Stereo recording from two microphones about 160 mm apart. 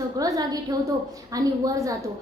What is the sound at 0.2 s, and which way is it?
A woman's voice, 20° right (ahead or behind).